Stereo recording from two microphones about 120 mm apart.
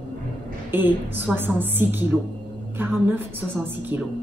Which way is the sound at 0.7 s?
15° right (ahead or behind).